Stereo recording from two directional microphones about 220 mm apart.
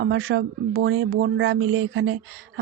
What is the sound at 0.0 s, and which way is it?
Speech, 60° right (ahead or behind).